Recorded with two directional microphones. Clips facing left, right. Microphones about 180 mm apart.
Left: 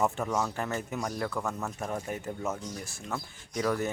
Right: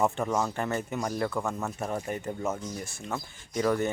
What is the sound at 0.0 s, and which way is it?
Speech, centre (ahead or behind).